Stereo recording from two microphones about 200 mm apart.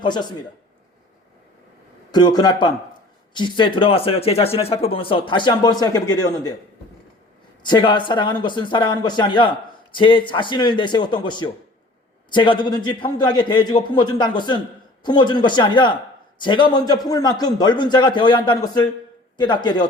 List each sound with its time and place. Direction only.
0.0 s speech: 20° left (ahead or behind)
2.1 s speech: 20° left (ahead or behind)
7.6 s speech: 25° left (ahead or behind)